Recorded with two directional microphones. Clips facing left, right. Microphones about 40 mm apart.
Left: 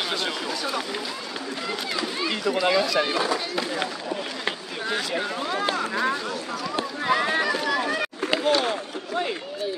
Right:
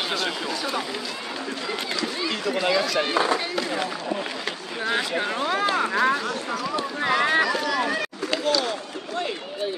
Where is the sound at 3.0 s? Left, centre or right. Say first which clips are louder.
Right 1 dB; centre.